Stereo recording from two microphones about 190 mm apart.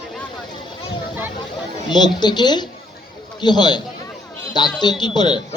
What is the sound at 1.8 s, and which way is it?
Speech, 20° left (ahead or behind).